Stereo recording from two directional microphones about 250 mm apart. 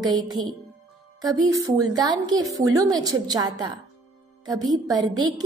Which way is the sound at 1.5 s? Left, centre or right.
Centre.